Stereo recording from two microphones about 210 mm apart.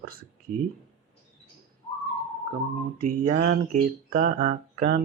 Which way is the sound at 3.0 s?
40° right (ahead or behind).